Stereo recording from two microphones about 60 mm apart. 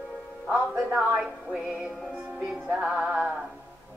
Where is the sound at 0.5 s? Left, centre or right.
Centre.